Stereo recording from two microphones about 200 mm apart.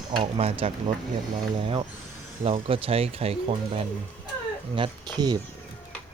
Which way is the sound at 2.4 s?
25° right (ahead or behind).